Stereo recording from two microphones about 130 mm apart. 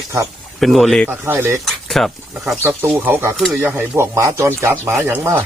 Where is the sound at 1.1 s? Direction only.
15° right (ahead or behind).